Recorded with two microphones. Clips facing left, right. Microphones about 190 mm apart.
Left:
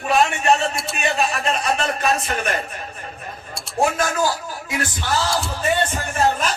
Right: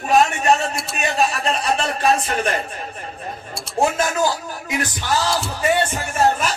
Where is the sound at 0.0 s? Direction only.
40° right (ahead or behind).